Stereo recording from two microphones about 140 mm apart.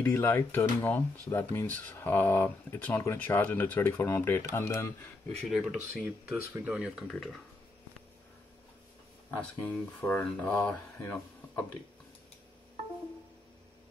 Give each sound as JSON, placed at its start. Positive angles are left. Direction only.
{"t": 0.0, "sound": "speech", "side_deg": 15}
{"t": 5.5, "sound": "speech", "side_deg": -5}
{"t": 9.9, "sound": "speech", "side_deg": 15}